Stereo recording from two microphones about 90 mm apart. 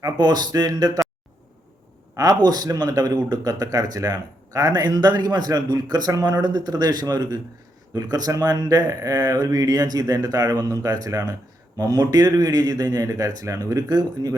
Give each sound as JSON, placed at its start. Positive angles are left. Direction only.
{"t": 0.0, "sound": "speech", "side_deg": -50}
{"t": 2.1, "sound": "speech", "side_deg": -45}